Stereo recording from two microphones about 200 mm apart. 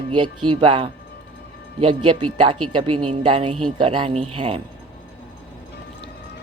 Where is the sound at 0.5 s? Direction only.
25° right (ahead or behind).